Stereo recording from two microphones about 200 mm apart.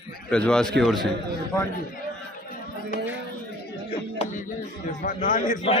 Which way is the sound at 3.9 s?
30° left (ahead or behind).